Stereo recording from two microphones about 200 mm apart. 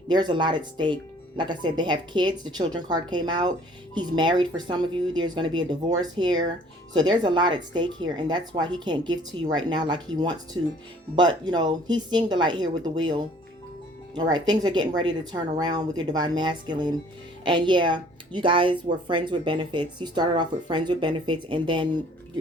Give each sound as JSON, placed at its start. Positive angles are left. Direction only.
{"t": 0.1, "sound": "speech", "side_deg": -20}